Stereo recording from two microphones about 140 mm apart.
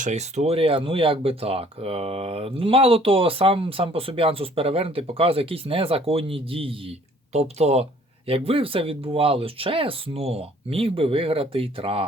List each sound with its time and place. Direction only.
0.0 s speech: 55° right (ahead or behind)